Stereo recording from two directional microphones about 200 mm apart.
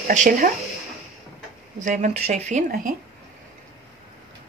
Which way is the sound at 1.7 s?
40° right (ahead or behind).